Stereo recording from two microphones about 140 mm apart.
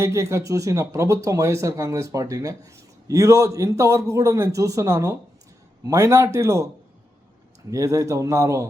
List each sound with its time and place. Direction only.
0.0 s speech: 20° right (ahead or behind)
7.7 s speech: 25° right (ahead or behind)